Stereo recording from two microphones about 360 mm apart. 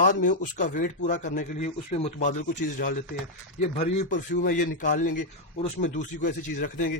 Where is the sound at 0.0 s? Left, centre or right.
Left.